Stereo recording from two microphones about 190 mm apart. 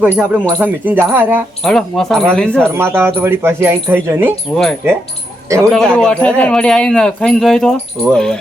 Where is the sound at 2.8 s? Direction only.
10° right (ahead or behind).